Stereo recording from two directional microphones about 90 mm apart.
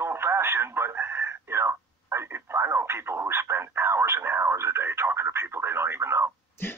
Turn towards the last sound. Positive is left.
turn(degrees=25)  # may be behind; listen again after turning